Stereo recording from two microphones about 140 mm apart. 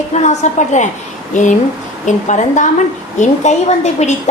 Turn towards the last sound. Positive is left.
turn(degrees=55)  # may be behind; listen again after turning